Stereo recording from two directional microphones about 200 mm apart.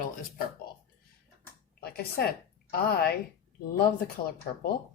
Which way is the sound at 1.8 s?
50° left (ahead or behind).